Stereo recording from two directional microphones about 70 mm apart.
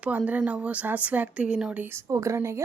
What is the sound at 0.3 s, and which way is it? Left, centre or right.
A woman's voice, centre.